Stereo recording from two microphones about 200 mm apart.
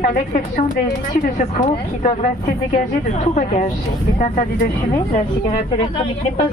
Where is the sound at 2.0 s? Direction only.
40° left (ahead or behind).